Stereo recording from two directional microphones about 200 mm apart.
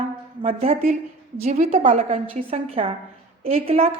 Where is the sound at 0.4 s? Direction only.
30° right (ahead or behind).